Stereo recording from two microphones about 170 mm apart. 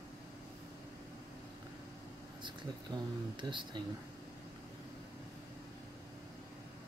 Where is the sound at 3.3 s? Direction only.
30° right (ahead or behind).